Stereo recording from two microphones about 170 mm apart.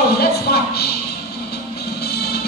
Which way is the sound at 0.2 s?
65° left (ahead or behind).